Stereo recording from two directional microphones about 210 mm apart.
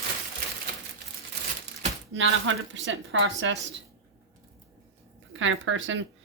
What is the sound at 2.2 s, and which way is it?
A woman's voice, 70° right (ahead or behind).